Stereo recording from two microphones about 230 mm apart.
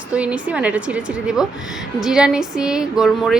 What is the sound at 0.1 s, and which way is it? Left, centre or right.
A woman's voice, centre.